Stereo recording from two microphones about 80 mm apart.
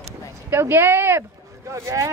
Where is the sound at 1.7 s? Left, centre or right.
Right.